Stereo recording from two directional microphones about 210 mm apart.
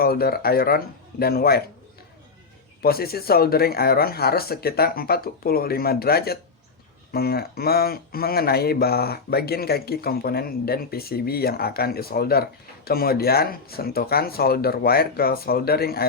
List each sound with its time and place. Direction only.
0.0 s speech: 45° left (ahead or behind)
2.8 s speech: 45° left (ahead or behind)